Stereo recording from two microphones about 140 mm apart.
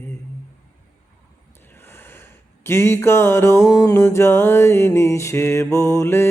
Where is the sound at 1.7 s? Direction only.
15° left (ahead or behind).